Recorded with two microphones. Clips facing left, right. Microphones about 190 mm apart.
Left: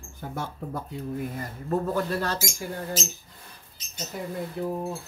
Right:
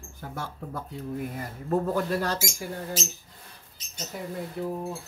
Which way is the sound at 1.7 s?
10° right (ahead or behind).